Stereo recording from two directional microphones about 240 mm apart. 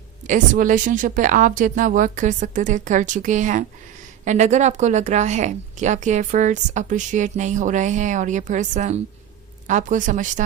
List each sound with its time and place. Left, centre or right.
0.3 s speech: right